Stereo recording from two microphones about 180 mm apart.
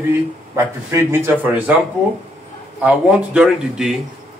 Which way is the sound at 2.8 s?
5° right (ahead or behind).